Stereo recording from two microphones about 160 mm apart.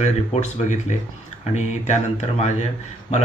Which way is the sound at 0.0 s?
45° left (ahead or behind).